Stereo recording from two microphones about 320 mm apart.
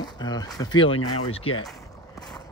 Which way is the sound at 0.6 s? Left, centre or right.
Centre.